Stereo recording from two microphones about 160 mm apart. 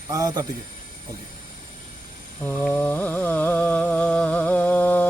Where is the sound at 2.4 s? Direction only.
10° left (ahead or behind).